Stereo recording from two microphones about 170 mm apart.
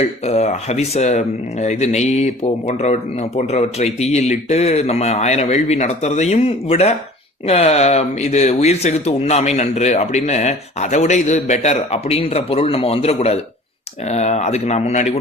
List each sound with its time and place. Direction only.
0.0 s speech: 40° left (ahead or behind)